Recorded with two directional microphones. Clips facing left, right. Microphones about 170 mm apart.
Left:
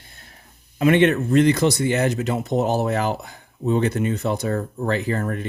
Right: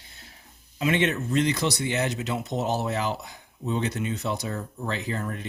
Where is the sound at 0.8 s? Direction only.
55° left (ahead or behind).